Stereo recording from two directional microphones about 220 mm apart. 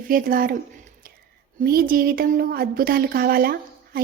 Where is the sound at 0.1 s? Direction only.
40° right (ahead or behind).